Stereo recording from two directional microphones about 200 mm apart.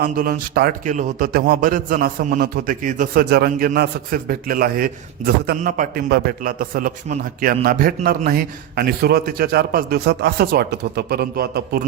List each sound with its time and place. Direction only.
0.0 s a man's voice: 45° right (ahead or behind)